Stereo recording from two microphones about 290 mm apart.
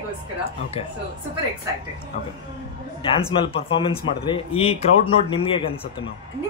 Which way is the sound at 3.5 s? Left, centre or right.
Centre.